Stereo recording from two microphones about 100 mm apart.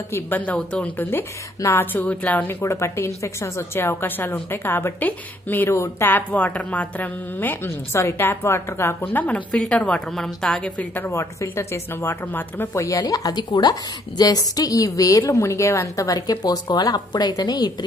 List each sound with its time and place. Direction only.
0.1 s a woman's voice: 15° left (ahead or behind)
2.6 s a woman's voice: 30° left (ahead or behind)
13.0 s a woman's voice: 40° left (ahead or behind)